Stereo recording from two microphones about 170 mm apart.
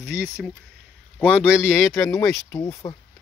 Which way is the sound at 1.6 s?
5° right (ahead or behind).